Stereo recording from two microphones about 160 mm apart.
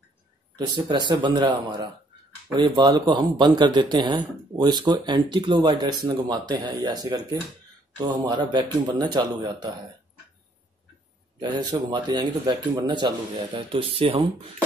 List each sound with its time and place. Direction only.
0.8 s speech: 30° right (ahead or behind)
11.3 s speech: 25° right (ahead or behind)